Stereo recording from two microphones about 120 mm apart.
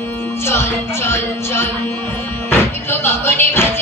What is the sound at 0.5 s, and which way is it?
Music, 20° left (ahead or behind).